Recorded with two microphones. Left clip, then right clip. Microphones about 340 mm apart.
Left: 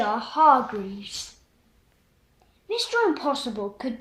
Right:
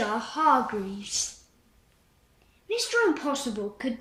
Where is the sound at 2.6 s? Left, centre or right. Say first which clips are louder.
Left 1 dB; centre.